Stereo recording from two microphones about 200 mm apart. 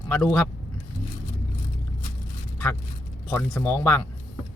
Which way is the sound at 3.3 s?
10° left (ahead or behind).